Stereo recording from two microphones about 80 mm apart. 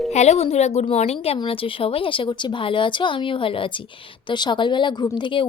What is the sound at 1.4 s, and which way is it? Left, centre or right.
Speech, left.